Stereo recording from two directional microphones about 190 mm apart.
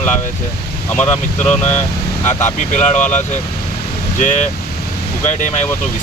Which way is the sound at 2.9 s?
40° left (ahead or behind).